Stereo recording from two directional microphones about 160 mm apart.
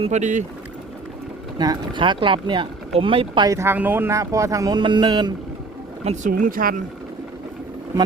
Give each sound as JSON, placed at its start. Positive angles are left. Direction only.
{"t": 0.0, "sound": "speech", "side_deg": -45}
{"t": 1.5, "sound": "speech", "side_deg": -25}
{"t": 6.1, "sound": "speech", "side_deg": -55}